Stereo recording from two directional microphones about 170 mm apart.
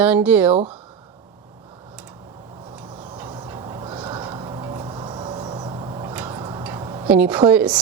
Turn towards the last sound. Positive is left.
turn(degrees=-10)  # may be behind; listen again after turning